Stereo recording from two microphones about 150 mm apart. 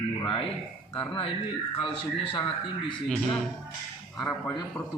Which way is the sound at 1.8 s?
35° left (ahead or behind).